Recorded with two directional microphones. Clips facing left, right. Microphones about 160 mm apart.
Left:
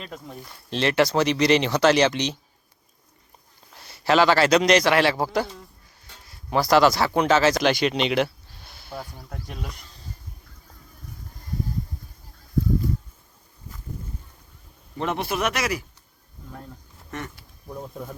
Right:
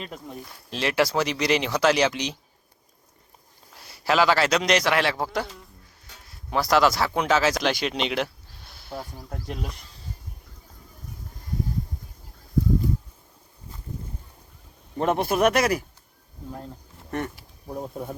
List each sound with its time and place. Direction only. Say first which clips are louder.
0.0 s speech: right 1 dB; 5° right (ahead or behind)
3.8 s speech: left 3 dB; centre (ahead or behind)
15.0 s speech: right 5 dB; 50° right (ahead or behind)
17.1 s speech: right 5 dB; 35° right (ahead or behind)